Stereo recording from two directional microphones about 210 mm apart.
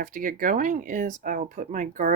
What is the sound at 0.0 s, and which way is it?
Speech, 40° right (ahead or behind).